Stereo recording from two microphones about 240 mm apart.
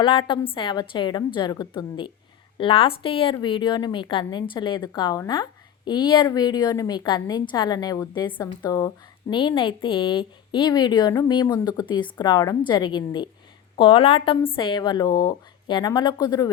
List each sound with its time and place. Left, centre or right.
0.0 s a woman's voice: left